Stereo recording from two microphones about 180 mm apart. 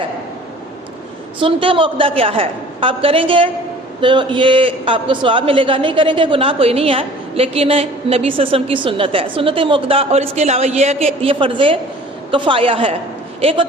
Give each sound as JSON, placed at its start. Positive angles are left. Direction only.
{"t": 1.4, "sound": "a man's voice", "side_deg": -30}